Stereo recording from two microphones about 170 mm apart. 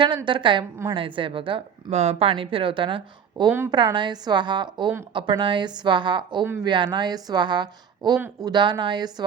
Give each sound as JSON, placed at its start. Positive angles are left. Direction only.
{"t": 0.3, "sound": "a woman's voice", "side_deg": -30}